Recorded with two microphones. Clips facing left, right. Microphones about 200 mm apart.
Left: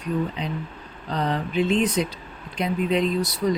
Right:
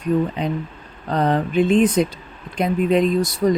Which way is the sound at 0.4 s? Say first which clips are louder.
Right 6 dB; 50° right (ahead or behind).